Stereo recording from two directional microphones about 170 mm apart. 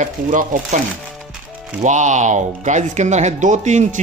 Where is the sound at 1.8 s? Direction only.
45° right (ahead or behind).